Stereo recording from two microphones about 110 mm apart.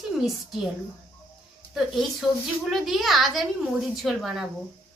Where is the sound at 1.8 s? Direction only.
Centre (ahead or behind).